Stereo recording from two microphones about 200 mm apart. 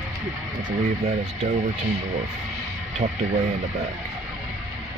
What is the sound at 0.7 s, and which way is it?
Speech, 35° right (ahead or behind).